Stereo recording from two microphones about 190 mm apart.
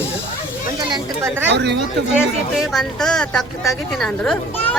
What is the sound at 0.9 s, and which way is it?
Speech, 15° right (ahead or behind).